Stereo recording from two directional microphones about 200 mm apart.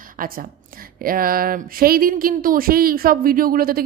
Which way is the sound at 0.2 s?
45° right (ahead or behind).